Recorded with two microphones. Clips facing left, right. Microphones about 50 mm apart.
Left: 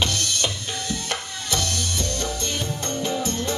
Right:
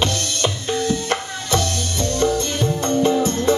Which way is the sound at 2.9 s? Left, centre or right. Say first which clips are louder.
Right 9 dB; right.